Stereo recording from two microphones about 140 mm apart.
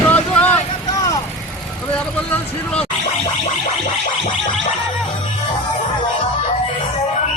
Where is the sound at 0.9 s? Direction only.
25° left (ahead or behind).